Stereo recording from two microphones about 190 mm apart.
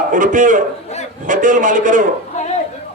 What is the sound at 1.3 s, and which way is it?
Speech, 45° right (ahead or behind).